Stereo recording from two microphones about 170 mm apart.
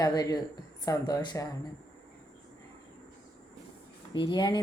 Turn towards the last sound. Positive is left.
turn(degrees=25)  # may be behind; listen again after turning